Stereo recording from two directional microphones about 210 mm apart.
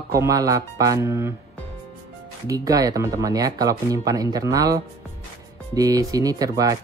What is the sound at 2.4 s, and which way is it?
Speech, 15° right (ahead or behind).